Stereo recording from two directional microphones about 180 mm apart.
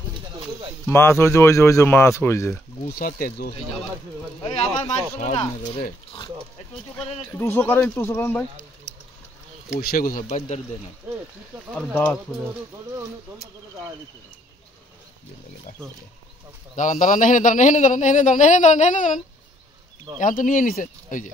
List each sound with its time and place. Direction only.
0.3 s a sound: 25° right (ahead or behind)
0.8 s speech: 15° left (ahead or behind)
2.9 s a man's voice: 55° left (ahead or behind)
4.4 s speech: 30° left (ahead or behind)
7.2 s speech: 10° left (ahead or behind)
9.8 s a man's voice: 55° left (ahead or behind)
10.2 s speech: 40° left (ahead or behind)
11.7 s speech: 10° left (ahead or behind)
16.7 s a man's voice: 45° left (ahead or behind)